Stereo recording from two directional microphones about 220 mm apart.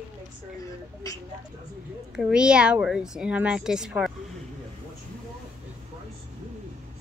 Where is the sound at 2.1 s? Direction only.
5° right (ahead or behind).